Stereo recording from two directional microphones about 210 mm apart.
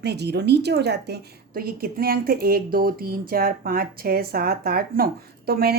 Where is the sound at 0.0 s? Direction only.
50° right (ahead or behind).